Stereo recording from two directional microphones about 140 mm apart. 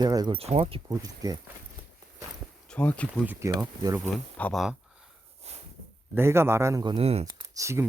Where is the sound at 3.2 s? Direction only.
15° right (ahead or behind).